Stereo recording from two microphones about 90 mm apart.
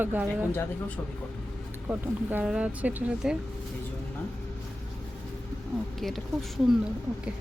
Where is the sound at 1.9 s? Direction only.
20° right (ahead or behind).